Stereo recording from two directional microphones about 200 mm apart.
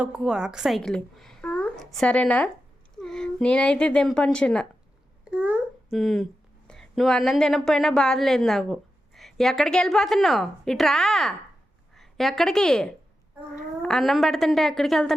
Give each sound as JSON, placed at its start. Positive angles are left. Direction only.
{"t": 0.0, "sound": "a woman's voice", "side_deg": -5}
{"t": 5.2, "sound": "babbling", "side_deg": -5}
{"t": 6.7, "sound": "a woman's voice", "side_deg": 0}